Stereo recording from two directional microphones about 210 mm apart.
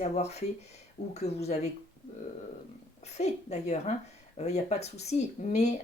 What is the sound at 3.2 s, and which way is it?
Speech, 30° left (ahead or behind).